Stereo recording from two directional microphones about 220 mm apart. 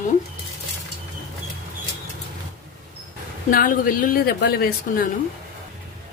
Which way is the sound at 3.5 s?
40° left (ahead or behind).